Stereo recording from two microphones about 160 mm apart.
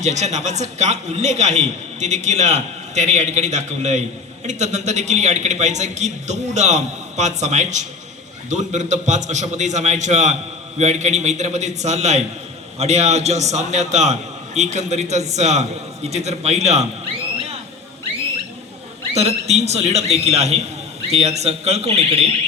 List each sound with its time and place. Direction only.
0.0 s a man's voice: 45° right (ahead or behind)
19.1 s a man's voice: 40° right (ahead or behind)